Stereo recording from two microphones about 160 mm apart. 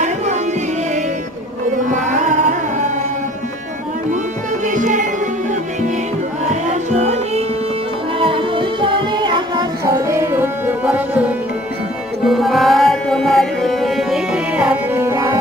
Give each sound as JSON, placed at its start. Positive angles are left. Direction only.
{"t": 1.9, "sound": "carnatic music", "side_deg": -50}
{"t": 4.6, "sound": "music", "side_deg": -55}
{"t": 6.5, "sound": "music", "side_deg": -45}
{"t": 8.2, "sound": "music", "side_deg": -35}